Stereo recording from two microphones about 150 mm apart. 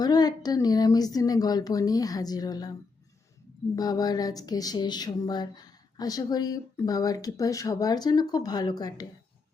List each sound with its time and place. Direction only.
0.0 s speech: 25° left (ahead or behind)
3.8 s speech: 25° left (ahead or behind)